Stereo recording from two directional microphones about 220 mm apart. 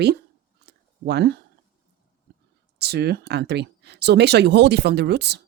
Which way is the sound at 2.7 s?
45° right (ahead or behind).